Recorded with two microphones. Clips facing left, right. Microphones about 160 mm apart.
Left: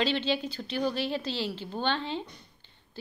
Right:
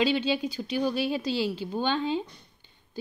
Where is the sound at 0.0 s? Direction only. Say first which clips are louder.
Right 3 dB; 10° right (ahead or behind).